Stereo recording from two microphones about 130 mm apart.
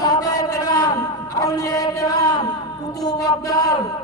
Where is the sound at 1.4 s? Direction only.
25° left (ahead or behind).